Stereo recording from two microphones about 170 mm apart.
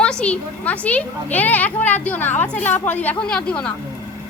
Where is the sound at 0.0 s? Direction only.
5° left (ahead or behind).